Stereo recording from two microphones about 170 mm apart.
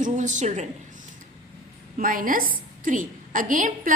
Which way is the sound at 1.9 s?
55° right (ahead or behind).